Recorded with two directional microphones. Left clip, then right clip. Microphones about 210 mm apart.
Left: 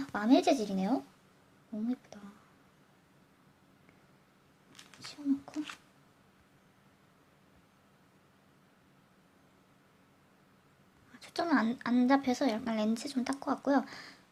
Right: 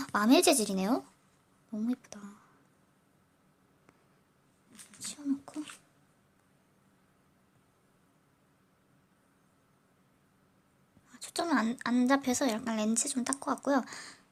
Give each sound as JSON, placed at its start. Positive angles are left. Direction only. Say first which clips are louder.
{"t": 0.0, "sound": "a woman's voice", "louder": "right 2 dB", "side_deg": -15}
{"t": 11.1, "sound": "a woman's voice", "louder": "even", "side_deg": -10}